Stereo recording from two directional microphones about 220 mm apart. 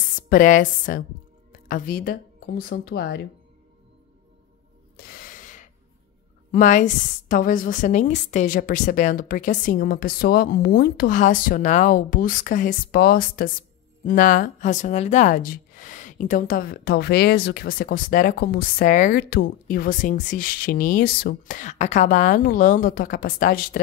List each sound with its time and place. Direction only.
0.3 s a woman's voice: 35° left (ahead or behind)
4.9 s a sound: 40° left (ahead or behind)
6.5 s a woman's voice: 35° left (ahead or behind)